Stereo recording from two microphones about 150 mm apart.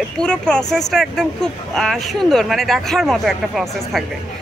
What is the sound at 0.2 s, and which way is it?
Speech, 5° left (ahead or behind).